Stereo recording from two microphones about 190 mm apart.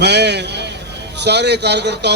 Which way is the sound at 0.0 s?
65° right (ahead or behind).